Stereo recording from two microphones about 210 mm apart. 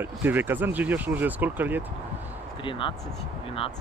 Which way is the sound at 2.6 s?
25° left (ahead or behind).